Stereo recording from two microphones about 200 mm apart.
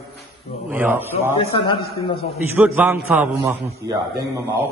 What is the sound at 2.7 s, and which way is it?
Speech, 10° right (ahead or behind).